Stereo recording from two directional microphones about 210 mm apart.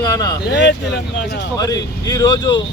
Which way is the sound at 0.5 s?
55° left (ahead or behind).